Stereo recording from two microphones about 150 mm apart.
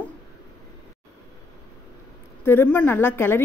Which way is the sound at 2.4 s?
15° left (ahead or behind).